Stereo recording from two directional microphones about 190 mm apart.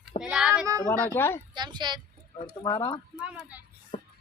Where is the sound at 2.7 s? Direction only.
20° left (ahead or behind).